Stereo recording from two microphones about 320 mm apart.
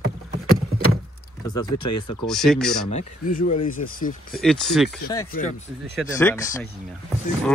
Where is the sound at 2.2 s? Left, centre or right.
Centre.